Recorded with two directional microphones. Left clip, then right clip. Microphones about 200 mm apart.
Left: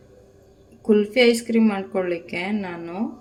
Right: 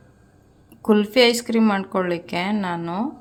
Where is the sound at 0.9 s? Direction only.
40° right (ahead or behind).